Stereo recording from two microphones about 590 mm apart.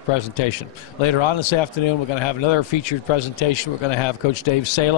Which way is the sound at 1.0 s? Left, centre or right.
Left.